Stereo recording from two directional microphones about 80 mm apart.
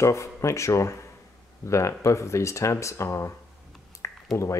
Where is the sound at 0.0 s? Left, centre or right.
Left.